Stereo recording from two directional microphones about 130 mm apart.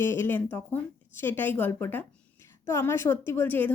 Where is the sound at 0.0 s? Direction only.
20° left (ahead or behind).